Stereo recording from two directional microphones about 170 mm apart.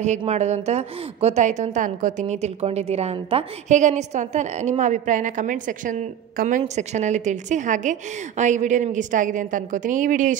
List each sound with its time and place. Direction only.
0.2 s a woman's voice: 40° right (ahead or behind)